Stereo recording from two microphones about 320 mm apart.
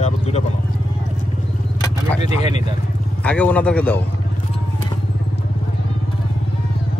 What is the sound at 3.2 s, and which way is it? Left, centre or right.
Speech, centre.